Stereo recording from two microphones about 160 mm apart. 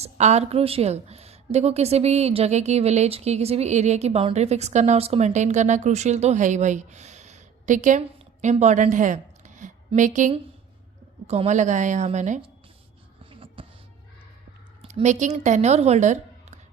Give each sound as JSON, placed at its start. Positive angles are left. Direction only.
{"t": 0.0, "sound": "a woman's voice", "side_deg": -45}
{"t": 13.3, "sound": "music", "side_deg": -35}
{"t": 14.8, "sound": "speech", "side_deg": -40}